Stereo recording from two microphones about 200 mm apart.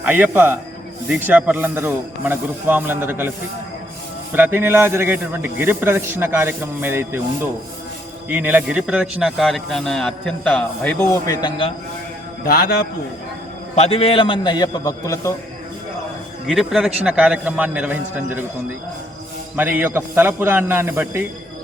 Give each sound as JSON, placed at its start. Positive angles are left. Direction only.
{"t": 0.0, "sound": "a man's voice", "side_deg": -10}
{"t": 4.4, "sound": "a man's voice", "side_deg": -10}
{"t": 8.3, "sound": "a man's voice", "side_deg": -10}
{"t": 12.5, "sound": "a man's voice", "side_deg": 50}
{"t": 13.7, "sound": "a man's voice", "side_deg": 30}
{"t": 16.5, "sound": "a man's voice", "side_deg": 0}
{"t": 19.5, "sound": "a man's voice", "side_deg": -10}